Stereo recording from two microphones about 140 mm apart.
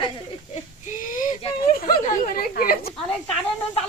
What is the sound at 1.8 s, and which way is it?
Speech, 90° left.